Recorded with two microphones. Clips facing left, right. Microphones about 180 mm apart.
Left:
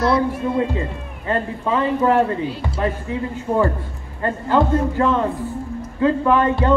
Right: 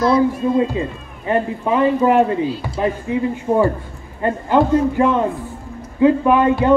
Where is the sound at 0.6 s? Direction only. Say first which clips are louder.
Right 3 dB; 15° right (ahead or behind).